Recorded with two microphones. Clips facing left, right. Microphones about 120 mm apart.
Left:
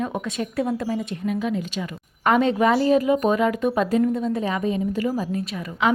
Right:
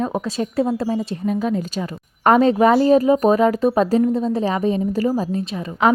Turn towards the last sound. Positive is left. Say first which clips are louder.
# right 3 dB
turn(degrees=-25)  # may be behind; listen again after turning